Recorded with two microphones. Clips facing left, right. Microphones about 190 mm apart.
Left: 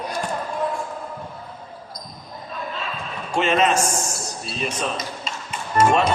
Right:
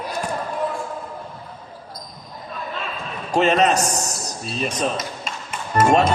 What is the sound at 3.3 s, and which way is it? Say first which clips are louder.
Speech: right 2 dB; 40° right (ahead or behind).